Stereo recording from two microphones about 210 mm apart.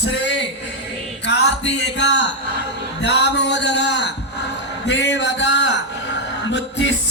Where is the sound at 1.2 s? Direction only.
55° left (ahead or behind).